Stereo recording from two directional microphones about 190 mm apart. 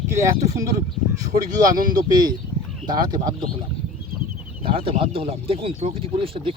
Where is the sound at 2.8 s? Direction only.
20° right (ahead or behind).